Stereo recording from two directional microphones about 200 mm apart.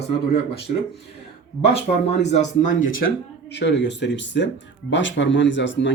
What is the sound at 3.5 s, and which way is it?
Speech, 60° left (ahead or behind).